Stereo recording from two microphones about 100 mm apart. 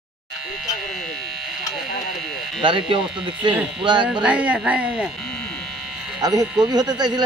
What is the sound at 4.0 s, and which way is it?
Speech, 10° right (ahead or behind).